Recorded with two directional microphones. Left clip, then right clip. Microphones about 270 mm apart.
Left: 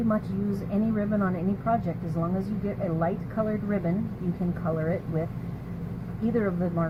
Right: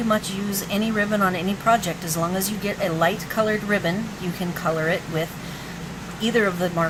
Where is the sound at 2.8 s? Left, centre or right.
Centre.